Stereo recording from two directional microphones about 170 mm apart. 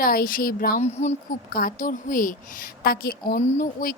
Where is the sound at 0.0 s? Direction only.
60° left (ahead or behind).